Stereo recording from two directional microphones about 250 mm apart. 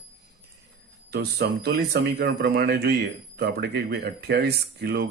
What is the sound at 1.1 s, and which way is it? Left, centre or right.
Speech, right.